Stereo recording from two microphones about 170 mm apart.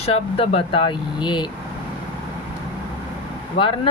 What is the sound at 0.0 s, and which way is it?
Speech, 35° left (ahead or behind).